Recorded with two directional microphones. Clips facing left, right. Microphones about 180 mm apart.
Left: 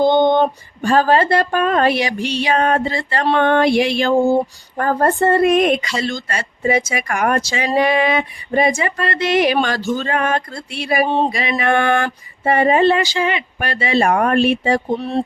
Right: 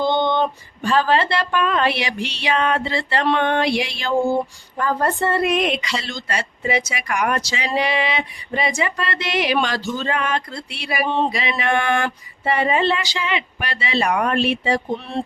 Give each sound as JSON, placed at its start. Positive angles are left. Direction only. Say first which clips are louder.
{"t": 0.0, "sound": "speech", "louder": "left 6 dB", "side_deg": 45}